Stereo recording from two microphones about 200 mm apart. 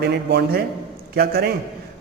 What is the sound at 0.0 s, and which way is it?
A man's voice, 50° right (ahead or behind).